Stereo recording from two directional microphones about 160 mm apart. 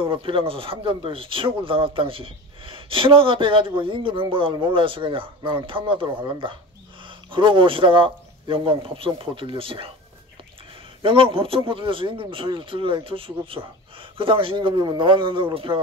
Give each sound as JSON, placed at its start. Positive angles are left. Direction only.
{"t": 0.0, "sound": "speech", "side_deg": -35}
{"t": 11.0, "sound": "speech", "side_deg": -35}